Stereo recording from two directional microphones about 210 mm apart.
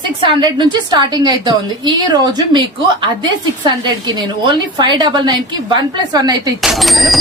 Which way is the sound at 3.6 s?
20° right (ahead or behind).